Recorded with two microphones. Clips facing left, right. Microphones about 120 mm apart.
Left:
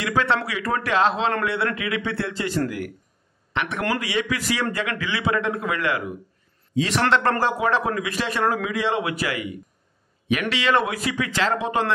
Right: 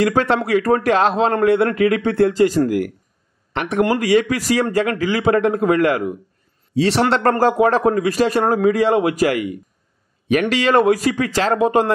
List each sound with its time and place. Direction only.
0.0 s speech: 45° right (ahead or behind)
6.7 s speech: 35° right (ahead or behind)